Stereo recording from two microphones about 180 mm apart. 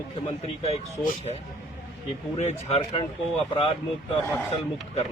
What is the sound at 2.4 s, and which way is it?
Speech, 35° left (ahead or behind).